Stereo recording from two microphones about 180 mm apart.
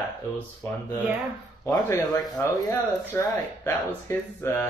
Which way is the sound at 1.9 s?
20° left (ahead or behind).